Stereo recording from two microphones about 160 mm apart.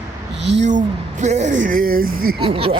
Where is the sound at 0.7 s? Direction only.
50° right (ahead or behind).